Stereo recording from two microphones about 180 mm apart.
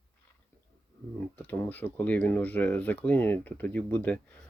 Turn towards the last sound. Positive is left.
turn(degrees=10)  # may be behind; listen again after turning